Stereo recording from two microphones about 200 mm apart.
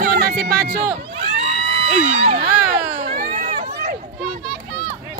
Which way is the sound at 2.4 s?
30° right (ahead or behind).